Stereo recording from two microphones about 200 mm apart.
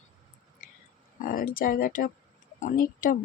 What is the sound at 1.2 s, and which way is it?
Speech, 45° left (ahead or behind).